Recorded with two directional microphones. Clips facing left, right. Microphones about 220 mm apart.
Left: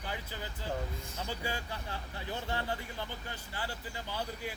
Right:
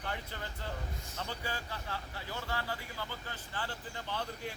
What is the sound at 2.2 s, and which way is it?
Speech, 20° left (ahead or behind).